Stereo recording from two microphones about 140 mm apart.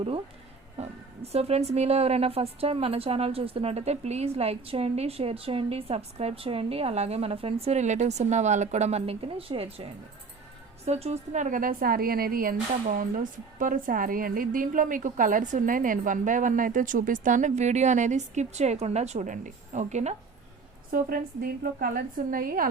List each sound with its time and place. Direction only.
0.8 s a woman's voice: 45° right (ahead or behind)
20.9 s a woman's voice: 90° right